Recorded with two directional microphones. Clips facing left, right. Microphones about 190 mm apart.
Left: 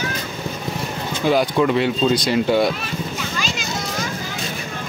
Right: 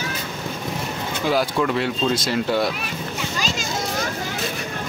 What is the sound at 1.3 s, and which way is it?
Speech, 5° left (ahead or behind).